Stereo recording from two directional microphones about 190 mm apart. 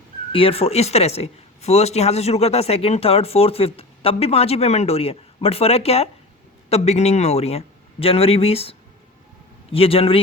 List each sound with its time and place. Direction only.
0.3 s speech: 30° left (ahead or behind)
9.7 s a man's voice: 30° left (ahead or behind)